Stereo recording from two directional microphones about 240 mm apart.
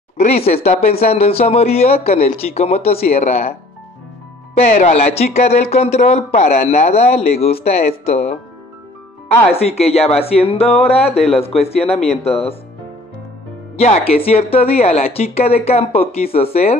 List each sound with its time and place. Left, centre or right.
0.2 s speech: left
4.6 s speech: left
9.5 s speech: left
13.7 s speech: left